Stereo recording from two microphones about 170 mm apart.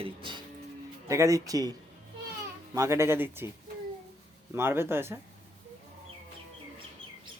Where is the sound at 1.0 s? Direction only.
20° right (ahead or behind).